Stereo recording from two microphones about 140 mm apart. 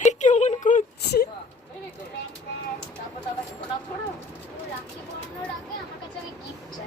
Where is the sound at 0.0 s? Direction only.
60° left (ahead or behind).